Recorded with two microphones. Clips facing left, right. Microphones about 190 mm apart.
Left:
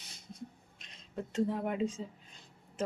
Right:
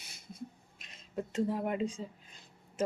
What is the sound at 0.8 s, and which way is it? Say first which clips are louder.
Speech: right 2 dB; 5° right (ahead or behind).